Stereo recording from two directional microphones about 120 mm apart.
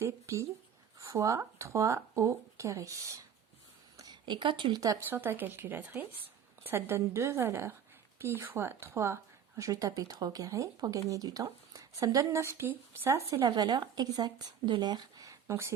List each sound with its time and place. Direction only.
0.0 s speech: 25° right (ahead or behind)
3.9 s a sound: 35° right (ahead or behind)
4.9 s a woman's voice: 15° right (ahead or behind)